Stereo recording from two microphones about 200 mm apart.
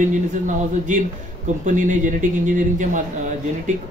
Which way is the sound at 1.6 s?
40° right (ahead or behind).